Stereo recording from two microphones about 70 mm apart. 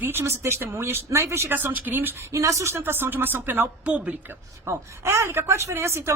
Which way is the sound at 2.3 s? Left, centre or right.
Right.